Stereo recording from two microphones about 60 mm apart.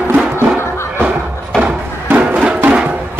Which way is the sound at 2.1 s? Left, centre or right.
Right.